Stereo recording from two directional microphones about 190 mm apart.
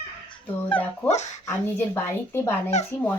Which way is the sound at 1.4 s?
10° left (ahead or behind).